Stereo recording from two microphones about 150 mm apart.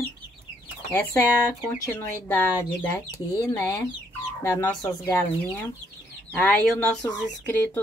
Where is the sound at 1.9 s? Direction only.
15° left (ahead or behind).